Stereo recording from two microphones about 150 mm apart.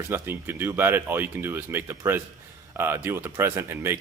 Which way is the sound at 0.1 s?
15° right (ahead or behind).